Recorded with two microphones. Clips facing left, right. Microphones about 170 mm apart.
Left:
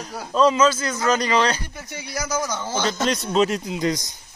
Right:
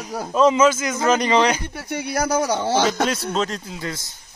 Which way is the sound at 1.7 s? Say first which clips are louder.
Right 7 dB; 60° right (ahead or behind).